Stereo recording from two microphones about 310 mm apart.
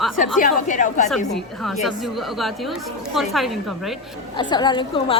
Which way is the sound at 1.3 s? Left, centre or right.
Centre.